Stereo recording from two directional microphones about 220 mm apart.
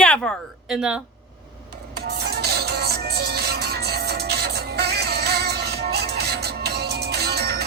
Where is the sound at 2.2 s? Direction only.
50° right (ahead or behind).